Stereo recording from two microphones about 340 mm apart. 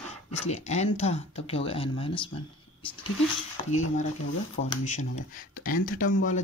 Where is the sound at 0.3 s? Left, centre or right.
Centre.